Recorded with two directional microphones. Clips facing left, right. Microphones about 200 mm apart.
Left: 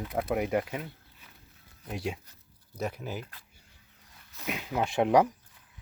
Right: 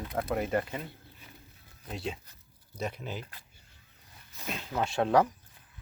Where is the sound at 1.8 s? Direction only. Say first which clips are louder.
Left 2 dB; 10° left (ahead or behind).